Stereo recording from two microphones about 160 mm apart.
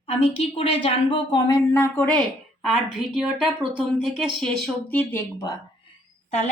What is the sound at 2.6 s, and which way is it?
A woman's voice, 5° right (ahead or behind).